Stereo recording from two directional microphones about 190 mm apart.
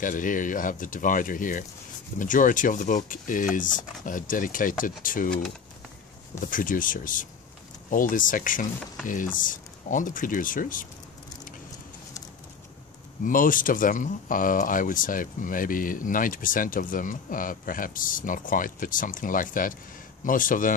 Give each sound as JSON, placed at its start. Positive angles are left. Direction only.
{"t": 0.0, "sound": "speech", "side_deg": 45}
{"t": 6.4, "sound": "speech", "side_deg": 45}
{"t": 13.2, "sound": "speech", "side_deg": 45}